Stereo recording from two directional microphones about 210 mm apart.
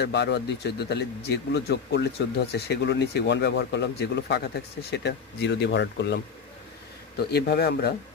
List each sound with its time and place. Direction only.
0.0 s speech: 55° left (ahead or behind)